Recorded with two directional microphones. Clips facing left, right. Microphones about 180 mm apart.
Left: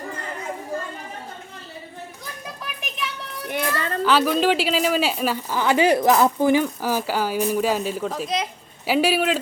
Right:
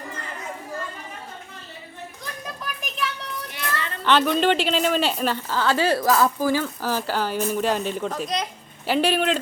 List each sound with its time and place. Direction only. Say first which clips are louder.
3.5 s child singing: left 8 dB; 50° left (ahead or behind)
4.0 s speech: even; 5° left (ahead or behind)